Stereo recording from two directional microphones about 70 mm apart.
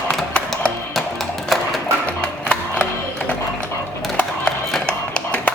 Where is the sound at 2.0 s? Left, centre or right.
Centre.